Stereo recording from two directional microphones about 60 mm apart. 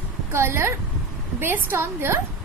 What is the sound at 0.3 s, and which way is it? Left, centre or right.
A woman's voice, right.